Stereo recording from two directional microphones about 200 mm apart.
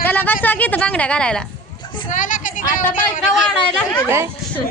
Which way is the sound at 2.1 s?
40° left (ahead or behind).